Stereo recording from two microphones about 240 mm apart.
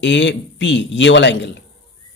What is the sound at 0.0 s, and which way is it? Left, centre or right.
A man's voice, left.